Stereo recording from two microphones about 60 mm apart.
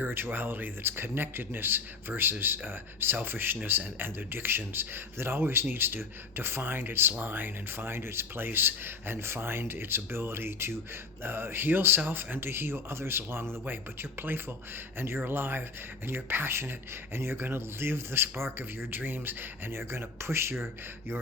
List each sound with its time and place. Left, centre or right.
0.0 s speech: right